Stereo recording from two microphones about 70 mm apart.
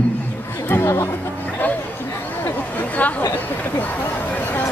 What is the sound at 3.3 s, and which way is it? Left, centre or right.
Speech, left.